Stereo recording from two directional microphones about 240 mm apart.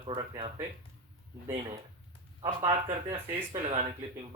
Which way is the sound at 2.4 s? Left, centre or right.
Right.